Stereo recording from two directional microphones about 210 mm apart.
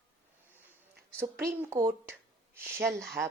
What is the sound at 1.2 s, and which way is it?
Speech, 10° right (ahead or behind).